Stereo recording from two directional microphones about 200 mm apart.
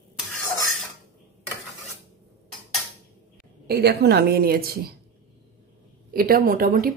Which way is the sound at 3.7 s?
55° right (ahead or behind).